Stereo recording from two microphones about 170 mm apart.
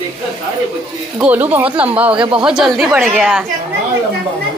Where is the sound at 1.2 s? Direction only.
10° right (ahead or behind).